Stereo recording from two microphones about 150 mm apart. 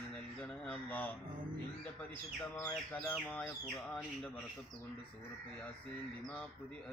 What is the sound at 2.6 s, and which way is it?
Bird, 10° left (ahead or behind).